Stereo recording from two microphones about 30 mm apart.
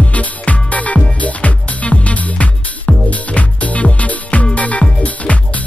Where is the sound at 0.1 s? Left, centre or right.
Left.